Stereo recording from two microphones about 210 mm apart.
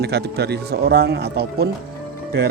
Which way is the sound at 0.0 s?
50° right (ahead or behind).